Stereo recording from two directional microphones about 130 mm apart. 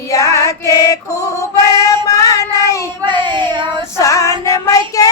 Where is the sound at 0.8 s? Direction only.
25° left (ahead or behind).